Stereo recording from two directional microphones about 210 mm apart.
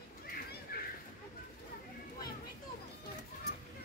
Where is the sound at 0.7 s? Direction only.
45° left (ahead or behind).